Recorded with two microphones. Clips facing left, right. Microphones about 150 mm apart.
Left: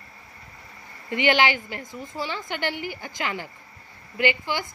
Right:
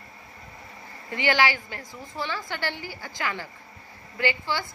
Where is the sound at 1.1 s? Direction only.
20° left (ahead or behind).